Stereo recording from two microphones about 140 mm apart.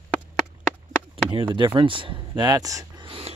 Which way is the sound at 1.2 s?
35° right (ahead or behind).